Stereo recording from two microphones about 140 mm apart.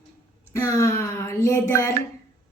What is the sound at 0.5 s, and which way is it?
A woman's voice, 20° left (ahead or behind).